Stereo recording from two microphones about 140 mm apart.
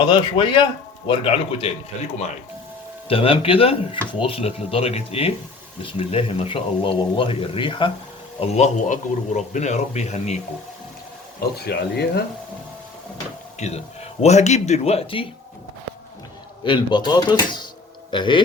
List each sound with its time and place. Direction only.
0.0 s a man's voice: 35° left (ahead or behind)
8.4 s a man's voice: 55° left (ahead or behind)
11.4 s speech: 90° left
13.6 s speech: 50° left (ahead or behind)
16.6 s a man's voice: 35° left (ahead or behind)